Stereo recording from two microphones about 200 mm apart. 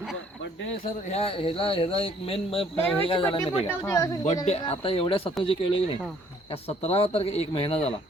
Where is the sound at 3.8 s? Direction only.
15° left (ahead or behind).